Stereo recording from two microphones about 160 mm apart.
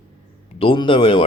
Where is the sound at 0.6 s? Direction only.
35° left (ahead or behind).